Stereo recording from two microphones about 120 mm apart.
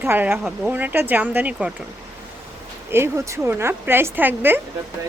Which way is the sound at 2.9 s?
20° right (ahead or behind).